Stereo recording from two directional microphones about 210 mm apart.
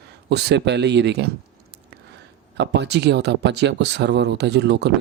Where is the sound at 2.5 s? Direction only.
55° right (ahead or behind).